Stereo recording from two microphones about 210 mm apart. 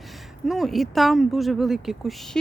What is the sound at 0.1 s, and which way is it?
Speech, centre (ahead or behind).